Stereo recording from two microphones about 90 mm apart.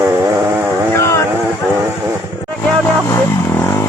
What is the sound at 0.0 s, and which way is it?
Vehicle, 30° right (ahead or behind).